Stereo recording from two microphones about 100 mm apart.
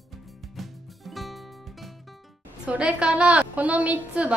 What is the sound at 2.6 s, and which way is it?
A woman's voice, 10° right (ahead or behind).